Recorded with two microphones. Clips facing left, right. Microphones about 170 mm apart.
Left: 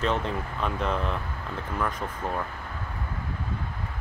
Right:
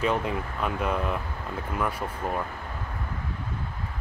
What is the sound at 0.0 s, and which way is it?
Speech, 10° right (ahead or behind).